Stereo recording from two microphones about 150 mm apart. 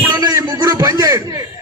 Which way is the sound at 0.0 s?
25° right (ahead or behind).